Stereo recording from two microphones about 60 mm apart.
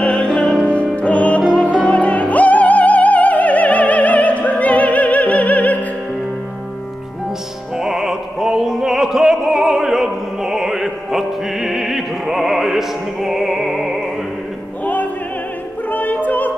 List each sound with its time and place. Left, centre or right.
0.0 s music: centre
7.7 s opera: centre
15.9 s opera: left